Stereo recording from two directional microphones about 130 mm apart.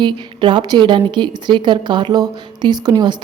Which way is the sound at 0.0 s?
40° right (ahead or behind).